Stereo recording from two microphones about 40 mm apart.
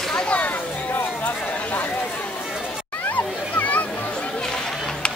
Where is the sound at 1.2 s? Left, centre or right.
Left.